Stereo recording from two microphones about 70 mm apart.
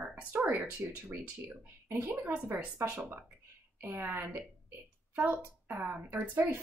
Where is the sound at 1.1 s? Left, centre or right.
Right.